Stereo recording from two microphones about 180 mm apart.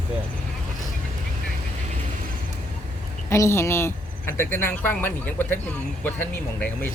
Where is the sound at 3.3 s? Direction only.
15° left (ahead or behind).